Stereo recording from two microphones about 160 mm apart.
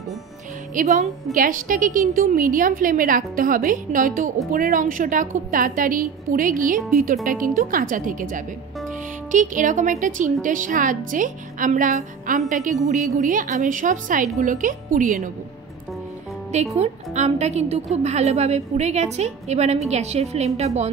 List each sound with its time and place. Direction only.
0.7 s a woman's voice: 55° right (ahead or behind)
16.7 s a woman's voice: 45° right (ahead or behind)